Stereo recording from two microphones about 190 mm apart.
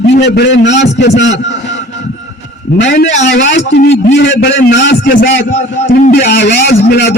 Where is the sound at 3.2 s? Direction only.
65° left (ahead or behind).